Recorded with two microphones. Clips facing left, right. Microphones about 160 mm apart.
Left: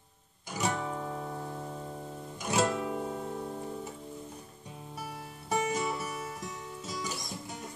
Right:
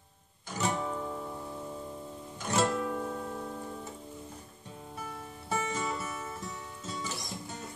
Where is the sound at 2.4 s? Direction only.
10° left (ahead or behind).